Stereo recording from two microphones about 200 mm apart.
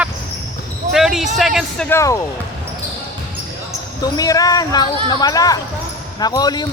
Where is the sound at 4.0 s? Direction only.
20° left (ahead or behind).